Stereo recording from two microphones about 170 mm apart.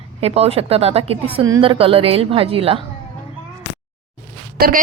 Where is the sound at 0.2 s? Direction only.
35° right (ahead or behind).